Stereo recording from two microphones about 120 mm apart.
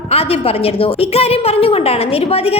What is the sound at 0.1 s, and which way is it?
A woman's voice, 55° left (ahead or behind).